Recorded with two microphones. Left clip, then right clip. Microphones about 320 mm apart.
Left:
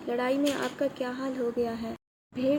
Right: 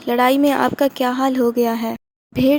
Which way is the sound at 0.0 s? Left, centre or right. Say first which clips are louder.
Right 12 dB; right.